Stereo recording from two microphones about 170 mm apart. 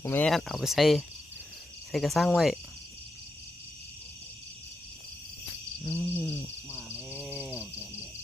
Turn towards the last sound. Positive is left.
turn(degrees=-10)  # may be behind; listen again after turning